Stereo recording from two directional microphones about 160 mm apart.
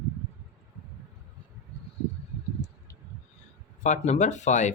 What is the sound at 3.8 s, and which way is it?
Speech, 45° left (ahead or behind).